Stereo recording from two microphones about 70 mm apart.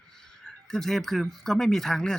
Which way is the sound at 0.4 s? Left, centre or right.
Centre.